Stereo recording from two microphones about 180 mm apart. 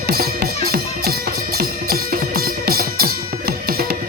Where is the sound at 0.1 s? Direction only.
55° right (ahead or behind).